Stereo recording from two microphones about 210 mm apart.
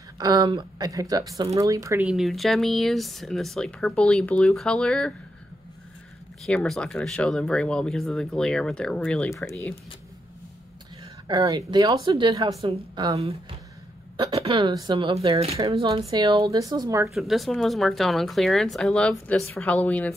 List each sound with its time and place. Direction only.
0.2 s speech: 20° right (ahead or behind)
2.0 s speech: centre (ahead or behind)
6.4 s speech: 5° left (ahead or behind)
11.2 s speech: 20° right (ahead or behind)
17.1 s a woman's voice: centre (ahead or behind)